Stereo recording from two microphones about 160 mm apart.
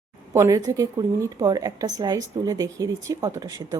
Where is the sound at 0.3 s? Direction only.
20° right (ahead or behind).